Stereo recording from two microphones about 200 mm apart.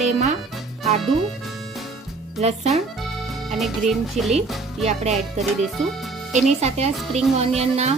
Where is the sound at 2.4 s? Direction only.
35° right (ahead or behind).